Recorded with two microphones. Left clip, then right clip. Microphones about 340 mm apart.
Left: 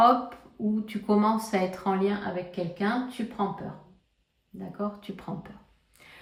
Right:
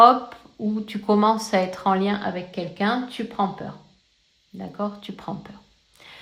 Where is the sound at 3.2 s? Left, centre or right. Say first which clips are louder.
Right 4 dB; centre.